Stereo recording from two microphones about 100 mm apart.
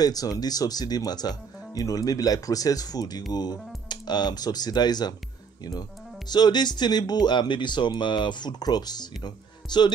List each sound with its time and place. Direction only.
0.0 s speech: 40° left (ahead or behind)